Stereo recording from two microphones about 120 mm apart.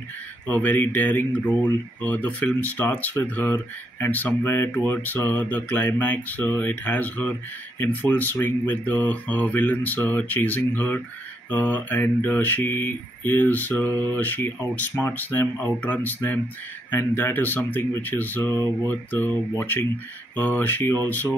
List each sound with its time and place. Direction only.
0.5 s speech: 15° left (ahead or behind)
18.5 s speech: 25° right (ahead or behind)
18.9 s speech: 15° left (ahead or behind)